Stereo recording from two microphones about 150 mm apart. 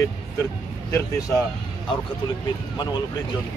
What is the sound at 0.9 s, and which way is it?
Speech, 25° left (ahead or behind).